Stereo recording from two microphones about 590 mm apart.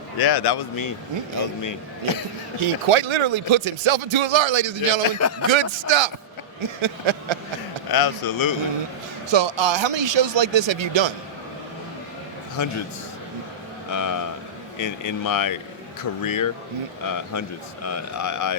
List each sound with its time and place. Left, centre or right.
0.2 s speech: left
2.6 s speech: right
5.0 s speech: left
5.5 s speech: right
7.9 s speech: left
9.3 s speech: right
13.9 s speech: left